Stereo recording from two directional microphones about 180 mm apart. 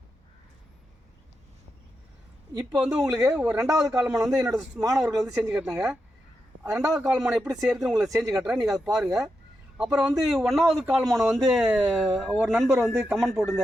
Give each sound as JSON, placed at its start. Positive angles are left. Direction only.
{"t": 2.6, "sound": "speech", "side_deg": -5}
{"t": 3.7, "sound": "a man's voice", "side_deg": -15}
{"t": 4.0, "sound": "a man's voice", "side_deg": -5}
{"t": 6.6, "sound": "a man's voice", "side_deg": -15}
{"t": 7.1, "sound": "speech", "side_deg": 0}